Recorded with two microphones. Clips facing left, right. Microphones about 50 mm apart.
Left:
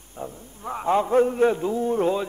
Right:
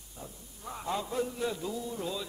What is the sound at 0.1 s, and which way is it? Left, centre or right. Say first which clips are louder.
A man's voice: left 12 dB; left.